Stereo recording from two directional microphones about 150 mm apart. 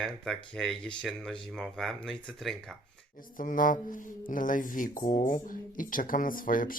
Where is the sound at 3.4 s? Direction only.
65° left (ahead or behind).